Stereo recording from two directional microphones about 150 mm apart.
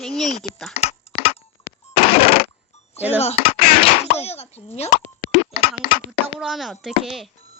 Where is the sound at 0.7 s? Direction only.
45° left (ahead or behind).